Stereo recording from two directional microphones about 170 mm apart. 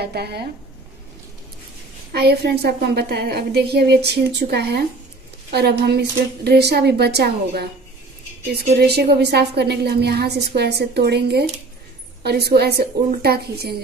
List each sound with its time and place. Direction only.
0.0 s a woman's voice: 70° right (ahead or behind)
2.1 s a woman's voice: 70° right (ahead or behind)
8.7 s a woman's voice: 70° right (ahead or behind)